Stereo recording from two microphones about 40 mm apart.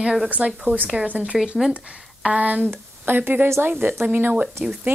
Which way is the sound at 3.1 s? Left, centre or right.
Right.